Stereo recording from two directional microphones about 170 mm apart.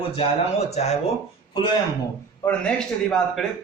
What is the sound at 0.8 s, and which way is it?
Speech, 40° left (ahead or behind).